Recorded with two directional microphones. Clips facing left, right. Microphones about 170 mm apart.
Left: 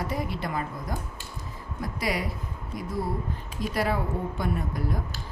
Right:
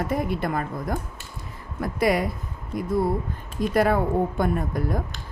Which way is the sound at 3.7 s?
50° right (ahead or behind).